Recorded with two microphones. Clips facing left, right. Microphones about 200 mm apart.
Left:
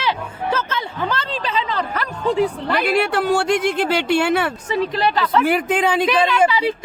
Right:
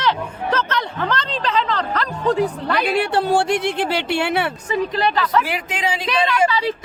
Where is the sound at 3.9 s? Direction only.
45° left (ahead or behind).